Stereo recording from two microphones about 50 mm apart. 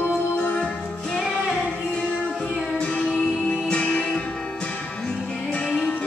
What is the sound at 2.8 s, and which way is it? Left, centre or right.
Music, left.